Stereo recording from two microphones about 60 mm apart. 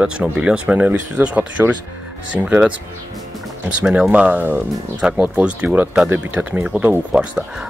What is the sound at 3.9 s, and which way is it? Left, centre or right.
Speech, centre.